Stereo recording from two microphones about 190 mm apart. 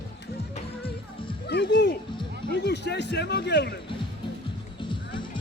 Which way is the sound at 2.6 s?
65° left (ahead or behind).